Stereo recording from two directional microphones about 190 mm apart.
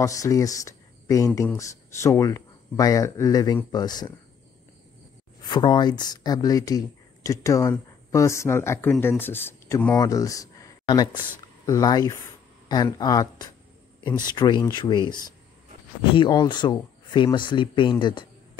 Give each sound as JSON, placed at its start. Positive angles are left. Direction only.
{"t": 0.0, "sound": "speech", "side_deg": 15}
{"t": 5.4, "sound": "speech", "side_deg": 25}